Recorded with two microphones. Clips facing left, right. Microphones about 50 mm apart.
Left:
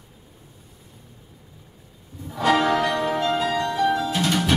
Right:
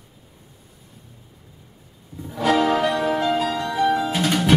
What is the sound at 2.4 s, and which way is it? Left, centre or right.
Music, left.